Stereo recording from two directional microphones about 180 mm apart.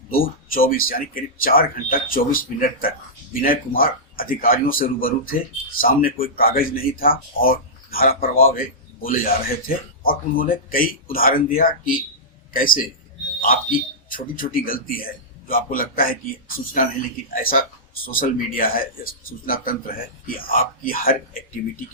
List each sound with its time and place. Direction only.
0.1 s speech: 55° left (ahead or behind)